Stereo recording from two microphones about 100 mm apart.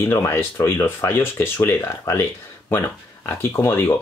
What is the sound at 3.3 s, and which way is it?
Speech, 25° left (ahead or behind).